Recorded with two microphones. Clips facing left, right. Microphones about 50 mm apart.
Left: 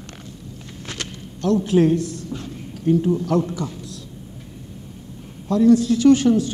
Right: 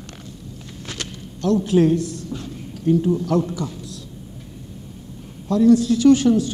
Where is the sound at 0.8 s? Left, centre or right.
Left.